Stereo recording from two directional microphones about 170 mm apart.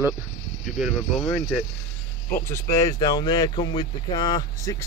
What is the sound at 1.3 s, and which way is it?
Speech, 5° left (ahead or behind).